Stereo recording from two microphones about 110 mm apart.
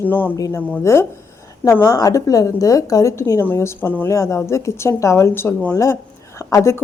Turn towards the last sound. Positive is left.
turn(degrees=25)  # may be behind; listen again after turning